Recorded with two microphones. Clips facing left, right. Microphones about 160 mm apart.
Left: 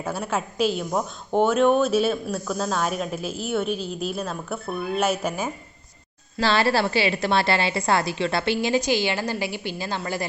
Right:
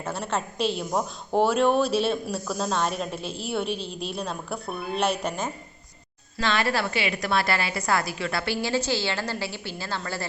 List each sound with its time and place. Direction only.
0.1 s a woman's voice: 5° left (ahead or behind)
6.4 s a woman's voice: 30° left (ahead or behind); by 10.2 s 15° left (ahead or behind)